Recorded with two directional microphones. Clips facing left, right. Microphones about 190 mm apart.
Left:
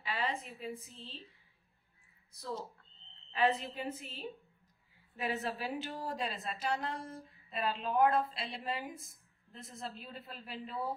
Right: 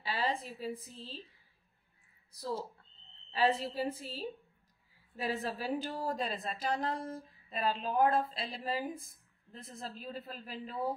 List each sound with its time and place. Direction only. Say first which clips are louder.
0.0 s a sound: right 2 dB; 30° right (ahead or behind)
0.6 s a woman's voice: right 3 dB; 35° right (ahead or behind)
3.3 s a woman's voice: right 2 dB; 30° right (ahead or behind)